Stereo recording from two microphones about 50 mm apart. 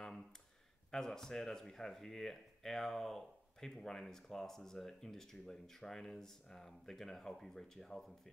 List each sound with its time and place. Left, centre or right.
0.9 s speech: centre